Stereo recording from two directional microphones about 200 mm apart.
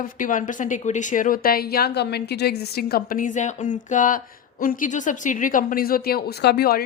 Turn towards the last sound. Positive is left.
turn(degrees=50)  # may be behind; listen again after turning